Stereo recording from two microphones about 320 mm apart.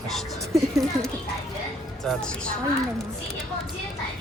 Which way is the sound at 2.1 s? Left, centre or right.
Centre.